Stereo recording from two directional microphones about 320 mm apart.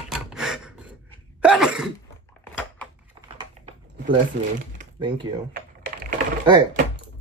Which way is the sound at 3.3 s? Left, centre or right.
Centre.